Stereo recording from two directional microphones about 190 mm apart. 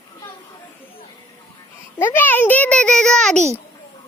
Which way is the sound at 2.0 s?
10° left (ahead or behind).